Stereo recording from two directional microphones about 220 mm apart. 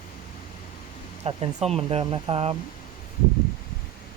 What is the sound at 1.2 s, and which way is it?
Speech, 25° right (ahead or behind).